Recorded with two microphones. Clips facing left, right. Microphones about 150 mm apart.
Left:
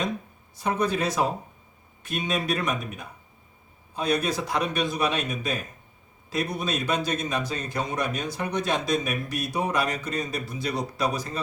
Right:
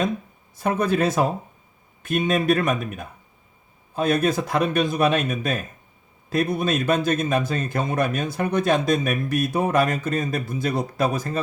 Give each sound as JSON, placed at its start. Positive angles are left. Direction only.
{"t": 0.5, "sound": "speech", "side_deg": -50}